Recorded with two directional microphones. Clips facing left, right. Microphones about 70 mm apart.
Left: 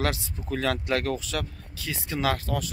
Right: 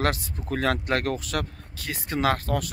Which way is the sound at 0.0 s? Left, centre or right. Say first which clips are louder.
Right 2 dB; right.